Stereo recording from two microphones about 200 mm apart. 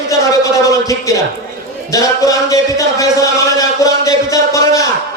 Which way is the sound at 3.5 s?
15° left (ahead or behind).